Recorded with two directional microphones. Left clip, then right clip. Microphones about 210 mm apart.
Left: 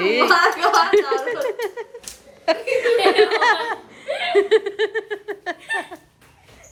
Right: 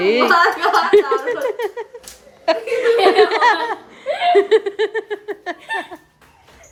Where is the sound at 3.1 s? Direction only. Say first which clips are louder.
Right 3 dB; 15° right (ahead or behind).